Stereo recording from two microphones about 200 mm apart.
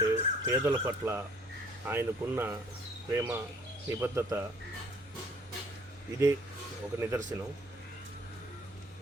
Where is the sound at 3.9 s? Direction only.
15° right (ahead or behind).